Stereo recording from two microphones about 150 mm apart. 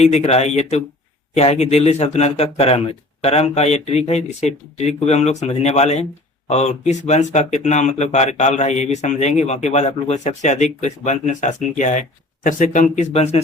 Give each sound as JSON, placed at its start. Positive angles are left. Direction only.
{"t": 0.0, "sound": "speech", "side_deg": 45}